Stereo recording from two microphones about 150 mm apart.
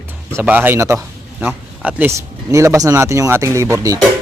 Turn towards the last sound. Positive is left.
turn(degrees=-20)  # may be behind; listen again after turning